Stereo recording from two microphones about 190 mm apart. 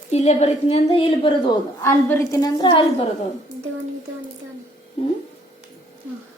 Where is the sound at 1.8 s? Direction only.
15° left (ahead or behind).